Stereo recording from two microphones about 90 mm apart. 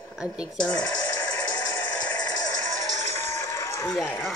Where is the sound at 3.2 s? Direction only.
30° left (ahead or behind).